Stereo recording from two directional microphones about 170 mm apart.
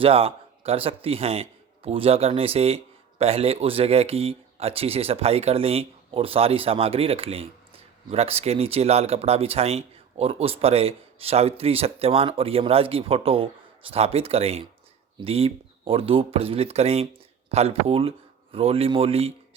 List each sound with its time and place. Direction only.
0.0 s speech: 35° right (ahead or behind)